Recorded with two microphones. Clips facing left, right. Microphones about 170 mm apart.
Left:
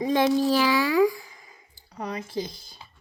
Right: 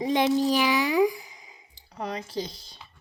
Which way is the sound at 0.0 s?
20° right (ahead or behind).